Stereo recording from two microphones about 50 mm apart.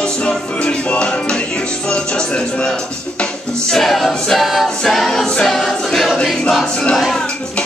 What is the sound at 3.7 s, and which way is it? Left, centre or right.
Choir, centre.